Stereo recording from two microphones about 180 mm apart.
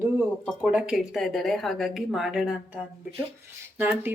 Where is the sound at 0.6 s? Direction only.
5° right (ahead or behind).